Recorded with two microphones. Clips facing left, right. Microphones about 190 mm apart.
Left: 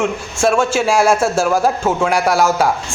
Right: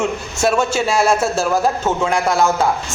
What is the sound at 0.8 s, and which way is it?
A man's voice, 10° left (ahead or behind).